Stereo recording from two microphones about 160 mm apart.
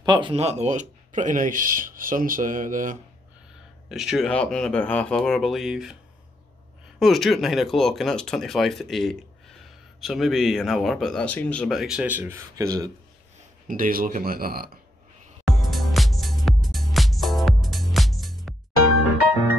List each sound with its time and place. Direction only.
0.0 s speech: 30° right (ahead or behind); by 3.0 s 55° right (ahead or behind)
3.9 s speech: 5° right (ahead or behind)
7.0 s speech: centre (ahead or behind); by 12.9 s 20° right (ahead or behind)
13.7 s speech: 60° right (ahead or behind)
15.4 s music: centre (ahead or behind)